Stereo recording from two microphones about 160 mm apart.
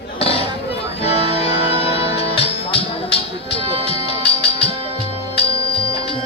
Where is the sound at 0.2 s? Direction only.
40° left (ahead or behind).